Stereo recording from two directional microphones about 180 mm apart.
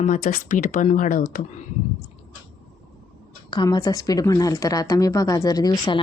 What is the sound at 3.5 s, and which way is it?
Speech, 20° left (ahead or behind).